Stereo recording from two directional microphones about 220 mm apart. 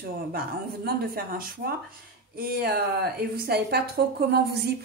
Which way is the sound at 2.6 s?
45° right (ahead or behind).